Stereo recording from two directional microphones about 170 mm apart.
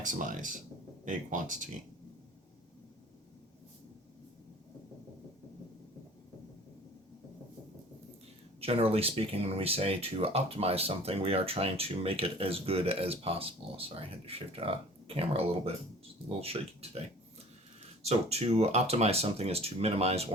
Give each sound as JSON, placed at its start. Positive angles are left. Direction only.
{"t": 0.0, "sound": "speech", "side_deg": -50}
{"t": 8.6, "sound": "speech", "side_deg": -35}
{"t": 18.0, "sound": "speech", "side_deg": -40}